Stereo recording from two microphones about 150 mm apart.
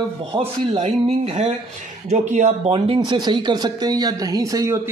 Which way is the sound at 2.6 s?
35° right (ahead or behind).